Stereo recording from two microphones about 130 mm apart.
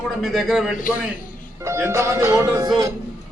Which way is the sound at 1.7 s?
25° right (ahead or behind).